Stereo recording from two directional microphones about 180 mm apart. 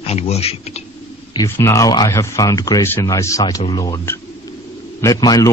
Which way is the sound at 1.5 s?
15° left (ahead or behind).